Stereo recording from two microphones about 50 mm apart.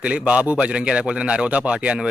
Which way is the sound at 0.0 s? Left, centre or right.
Right.